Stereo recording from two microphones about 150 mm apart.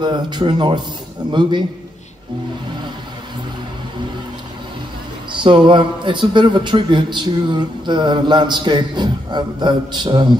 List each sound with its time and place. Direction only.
0.0 s a man's voice: 30° right (ahead or behind)
5.3 s a man's voice: 35° right (ahead or behind)